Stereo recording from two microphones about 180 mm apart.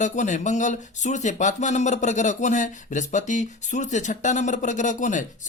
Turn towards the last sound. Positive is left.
turn(degrees=45)  # may be behind; listen again after turning